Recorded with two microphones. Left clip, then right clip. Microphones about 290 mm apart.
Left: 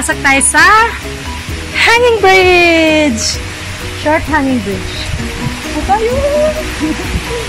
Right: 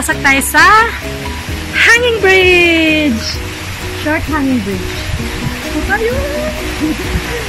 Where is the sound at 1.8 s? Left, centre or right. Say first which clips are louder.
Left 1 dB; centre.